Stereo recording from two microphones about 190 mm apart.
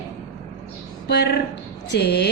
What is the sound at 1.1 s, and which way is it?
A woman's voice, 60° left (ahead or behind).